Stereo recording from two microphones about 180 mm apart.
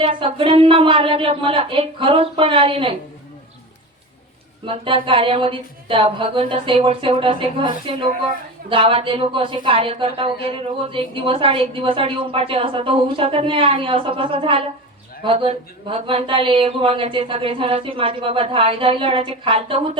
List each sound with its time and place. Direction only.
0.0 s speech: 30° right (ahead or behind)
4.6 s speech: 30° right (ahead or behind)